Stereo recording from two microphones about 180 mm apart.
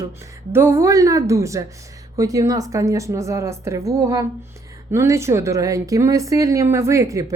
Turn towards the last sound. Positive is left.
turn(degrees=-20)  # may be behind; listen again after turning